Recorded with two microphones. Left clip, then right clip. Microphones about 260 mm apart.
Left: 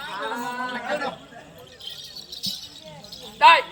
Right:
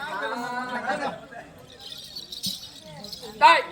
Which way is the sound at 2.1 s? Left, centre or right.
Centre.